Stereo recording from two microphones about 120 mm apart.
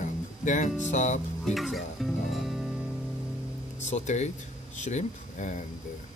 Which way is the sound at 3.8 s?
75° left (ahead or behind).